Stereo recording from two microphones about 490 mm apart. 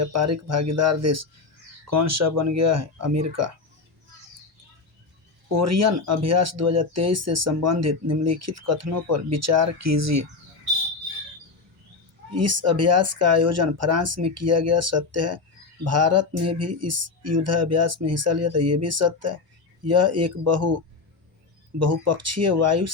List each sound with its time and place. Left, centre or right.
0.0 s speech: right
5.5 s speech: right
12.3 s speech: right